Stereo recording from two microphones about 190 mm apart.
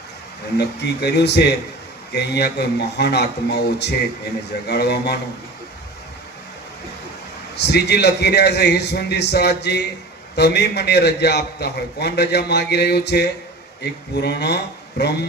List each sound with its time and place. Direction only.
0.5 s a man's voice: 60° left (ahead or behind)
7.5 s a man's voice: 60° left (ahead or behind)